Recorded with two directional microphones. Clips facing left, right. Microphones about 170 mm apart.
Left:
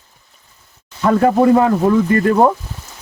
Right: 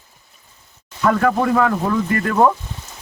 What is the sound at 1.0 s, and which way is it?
Speech, 30° left (ahead or behind).